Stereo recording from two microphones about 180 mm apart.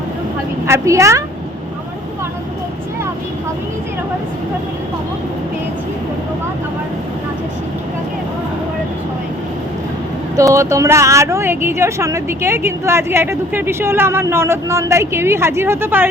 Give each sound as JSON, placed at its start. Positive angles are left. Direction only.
{"t": 0.7, "sound": "speech", "side_deg": -15}
{"t": 10.3, "sound": "speech", "side_deg": -15}